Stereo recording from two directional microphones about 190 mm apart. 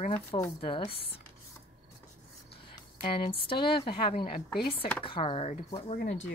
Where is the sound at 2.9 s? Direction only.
25° left (ahead or behind).